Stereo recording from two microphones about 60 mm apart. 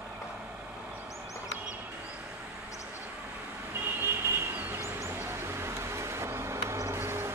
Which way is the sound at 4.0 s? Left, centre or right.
Right.